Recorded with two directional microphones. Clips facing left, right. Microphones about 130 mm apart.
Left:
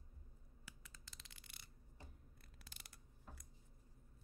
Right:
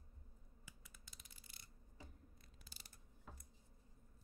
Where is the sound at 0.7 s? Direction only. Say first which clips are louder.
Left 3 dB; 85° left; by 1.7 s 70° left (ahead or behind).